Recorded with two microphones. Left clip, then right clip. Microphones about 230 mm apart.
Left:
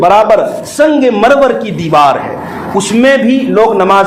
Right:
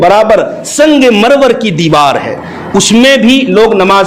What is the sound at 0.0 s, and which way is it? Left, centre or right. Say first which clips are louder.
A man's voice: right 1 dB; right.